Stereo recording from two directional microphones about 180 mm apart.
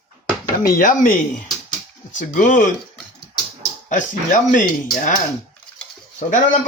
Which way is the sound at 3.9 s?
45° left (ahead or behind).